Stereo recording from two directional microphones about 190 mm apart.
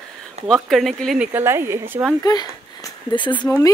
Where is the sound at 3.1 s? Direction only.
25° left (ahead or behind).